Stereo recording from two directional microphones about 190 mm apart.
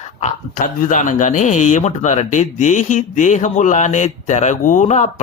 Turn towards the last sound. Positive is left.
turn(degrees=40)  # may be behind; listen again after turning